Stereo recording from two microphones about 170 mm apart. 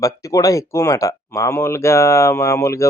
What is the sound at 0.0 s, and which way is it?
Speech, 20° left (ahead or behind).